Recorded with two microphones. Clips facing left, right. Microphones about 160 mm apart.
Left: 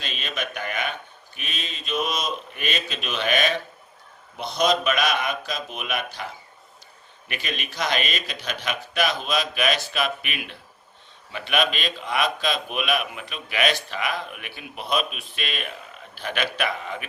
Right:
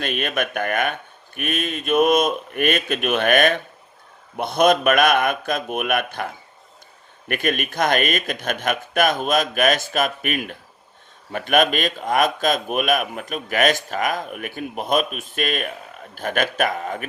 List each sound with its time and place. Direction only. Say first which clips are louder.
0.0 s a man's voice: right 8 dB; 55° right (ahead or behind)